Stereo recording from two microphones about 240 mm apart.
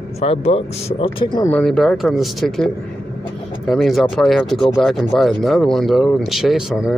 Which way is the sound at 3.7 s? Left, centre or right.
Centre.